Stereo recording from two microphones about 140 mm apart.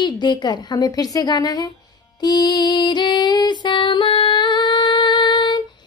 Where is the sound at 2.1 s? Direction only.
30° left (ahead or behind).